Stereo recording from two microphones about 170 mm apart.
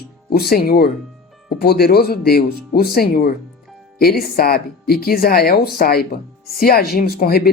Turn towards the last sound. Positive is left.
turn(degrees=65)  # may be behind; listen again after turning